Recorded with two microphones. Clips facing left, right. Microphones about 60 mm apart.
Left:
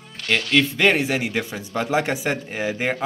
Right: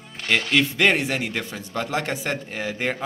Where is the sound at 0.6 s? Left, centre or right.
Centre.